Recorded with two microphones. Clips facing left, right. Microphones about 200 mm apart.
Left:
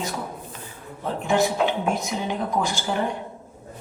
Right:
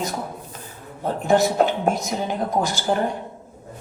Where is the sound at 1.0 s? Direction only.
40° right (ahead or behind).